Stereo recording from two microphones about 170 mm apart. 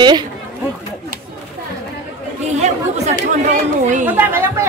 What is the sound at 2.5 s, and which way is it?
Speech, 40° right (ahead or behind).